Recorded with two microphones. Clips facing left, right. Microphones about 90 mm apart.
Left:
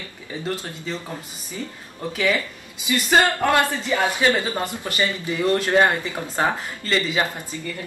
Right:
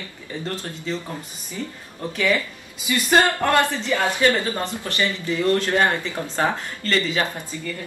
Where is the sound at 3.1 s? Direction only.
10° left (ahead or behind).